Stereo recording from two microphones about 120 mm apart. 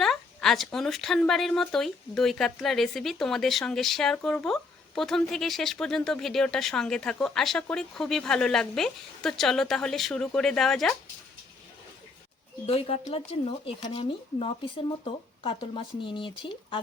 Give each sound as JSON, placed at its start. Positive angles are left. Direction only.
{"t": 0.0, "sound": "speech", "side_deg": 5}
{"t": 12.6, "sound": "speech", "side_deg": 55}
{"t": 14.0, "sound": "speech", "side_deg": 45}